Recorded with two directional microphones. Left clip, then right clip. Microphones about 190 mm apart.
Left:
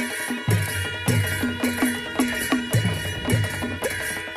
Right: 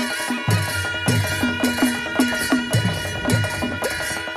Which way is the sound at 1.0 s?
35° right (ahead or behind).